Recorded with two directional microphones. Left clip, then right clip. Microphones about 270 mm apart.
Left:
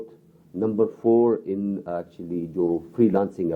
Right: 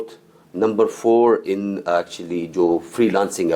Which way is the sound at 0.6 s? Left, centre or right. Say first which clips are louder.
Right 5 dB; centre.